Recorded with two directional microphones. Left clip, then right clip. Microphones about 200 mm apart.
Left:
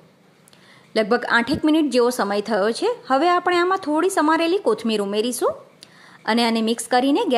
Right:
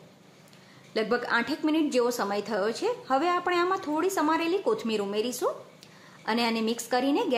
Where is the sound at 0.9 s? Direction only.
40° left (ahead or behind).